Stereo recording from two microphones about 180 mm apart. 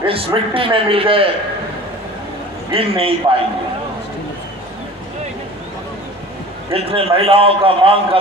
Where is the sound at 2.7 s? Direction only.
30° right (ahead or behind).